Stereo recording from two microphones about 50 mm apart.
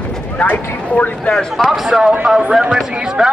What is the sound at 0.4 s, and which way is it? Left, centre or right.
Vehicle, left.